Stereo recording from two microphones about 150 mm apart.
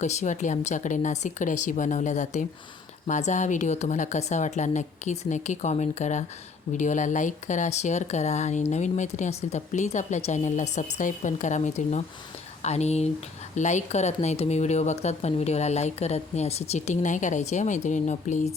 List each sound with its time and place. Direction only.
0.0 s speech: 50° left (ahead or behind)